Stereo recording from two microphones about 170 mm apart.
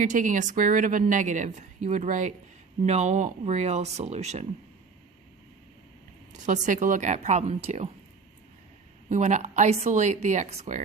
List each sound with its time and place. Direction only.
0.0 s a woman's voice: 50° right (ahead or behind)
6.4 s a woman's voice: 45° right (ahead or behind)
9.0 s a woman's voice: 45° right (ahead or behind)